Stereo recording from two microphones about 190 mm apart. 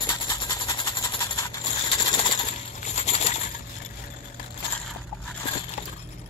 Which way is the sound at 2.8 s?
35° left (ahead or behind).